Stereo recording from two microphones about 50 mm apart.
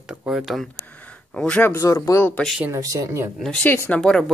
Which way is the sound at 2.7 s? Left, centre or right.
Right.